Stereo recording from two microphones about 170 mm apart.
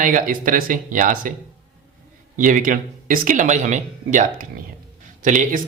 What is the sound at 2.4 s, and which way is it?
Speech, 50° right (ahead or behind).